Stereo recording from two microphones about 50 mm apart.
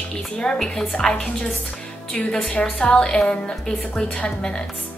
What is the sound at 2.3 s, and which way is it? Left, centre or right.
A woman's voice, centre.